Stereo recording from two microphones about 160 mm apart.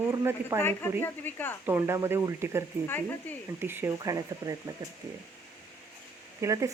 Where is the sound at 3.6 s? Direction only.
15° right (ahead or behind).